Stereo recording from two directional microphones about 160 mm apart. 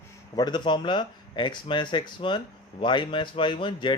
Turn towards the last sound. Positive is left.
turn(degrees=30)  # may be behind; listen again after turning